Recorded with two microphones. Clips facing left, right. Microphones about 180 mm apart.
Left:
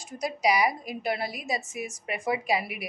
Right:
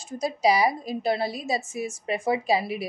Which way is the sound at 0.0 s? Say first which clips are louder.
Right 4 dB; 30° right (ahead or behind).